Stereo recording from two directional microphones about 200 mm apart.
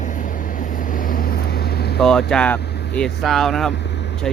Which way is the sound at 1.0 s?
45° left (ahead or behind).